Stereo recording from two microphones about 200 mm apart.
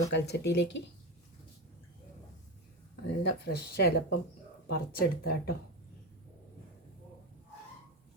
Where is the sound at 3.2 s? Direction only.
50° left (ahead or behind).